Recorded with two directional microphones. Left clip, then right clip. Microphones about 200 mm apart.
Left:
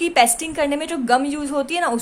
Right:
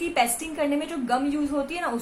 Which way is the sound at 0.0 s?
50° left (ahead or behind).